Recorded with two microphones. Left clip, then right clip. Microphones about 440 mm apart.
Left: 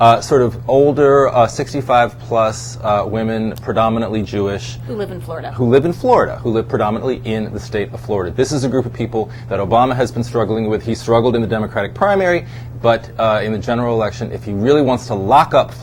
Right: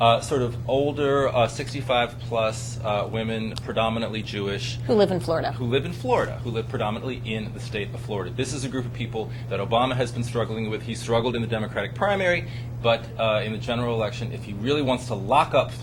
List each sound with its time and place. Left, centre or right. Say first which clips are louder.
0.0 s speech: left 10 dB; left
4.9 s speech: right 4 dB; right
5.7 s speech: left 12 dB; left